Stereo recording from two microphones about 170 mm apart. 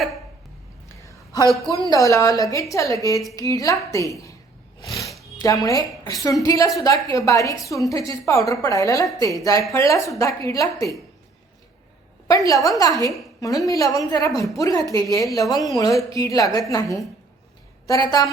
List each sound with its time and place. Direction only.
1.9 s a woman's voice: 20° left (ahead or behind)
4.8 s roaring cats: 20° left (ahead or behind)
5.6 s a woman's voice: 20° left (ahead or behind)
12.3 s a woman's voice: 20° left (ahead or behind)